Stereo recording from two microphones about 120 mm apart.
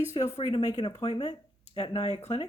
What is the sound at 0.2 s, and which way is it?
Speech, 55° left (ahead or behind).